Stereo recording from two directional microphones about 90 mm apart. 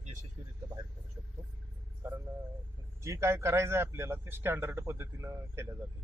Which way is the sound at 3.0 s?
35° right (ahead or behind).